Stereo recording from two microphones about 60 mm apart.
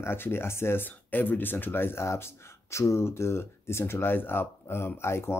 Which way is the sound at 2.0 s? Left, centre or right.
Left.